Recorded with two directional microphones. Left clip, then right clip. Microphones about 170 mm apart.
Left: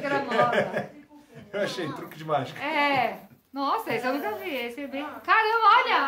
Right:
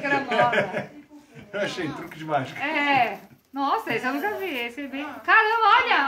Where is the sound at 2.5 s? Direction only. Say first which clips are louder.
Right 4 dB; centre (ahead or behind).